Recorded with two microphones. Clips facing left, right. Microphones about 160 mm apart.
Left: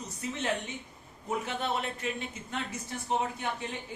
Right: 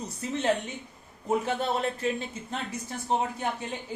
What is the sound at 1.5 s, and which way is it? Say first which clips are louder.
Speech: right 5 dB; 35° right (ahead or behind).